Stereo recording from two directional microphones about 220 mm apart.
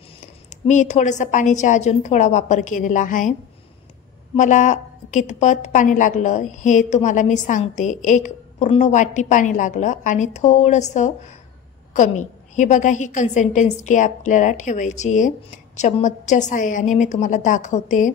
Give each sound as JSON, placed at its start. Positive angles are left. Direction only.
{"t": 0.5, "sound": "a woman's voice", "side_deg": 35}
{"t": 4.4, "sound": "a woman's voice", "side_deg": 35}